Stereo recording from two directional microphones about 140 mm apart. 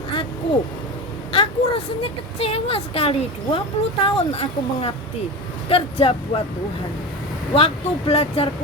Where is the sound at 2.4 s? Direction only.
45° left (ahead or behind).